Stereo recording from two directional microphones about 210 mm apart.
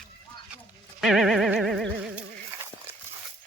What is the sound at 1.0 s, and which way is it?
Music, centre (ahead or behind).